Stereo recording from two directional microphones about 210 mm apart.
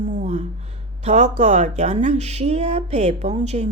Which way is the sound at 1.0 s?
35° right (ahead or behind).